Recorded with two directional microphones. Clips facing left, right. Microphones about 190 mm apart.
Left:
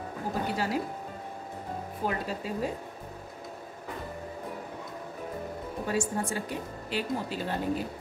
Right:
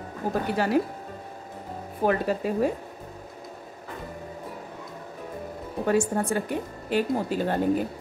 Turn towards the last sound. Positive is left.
turn(degrees=-50)  # may be behind; listen again after turning